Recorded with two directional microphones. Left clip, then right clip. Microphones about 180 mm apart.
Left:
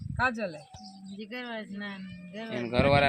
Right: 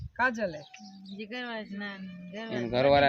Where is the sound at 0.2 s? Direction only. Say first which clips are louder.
Right 1 dB; centre (ahead or behind).